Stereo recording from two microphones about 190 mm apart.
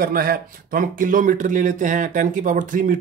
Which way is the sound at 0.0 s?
50° right (ahead or behind).